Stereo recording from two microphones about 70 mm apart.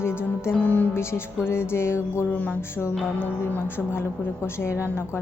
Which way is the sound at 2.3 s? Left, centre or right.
Left.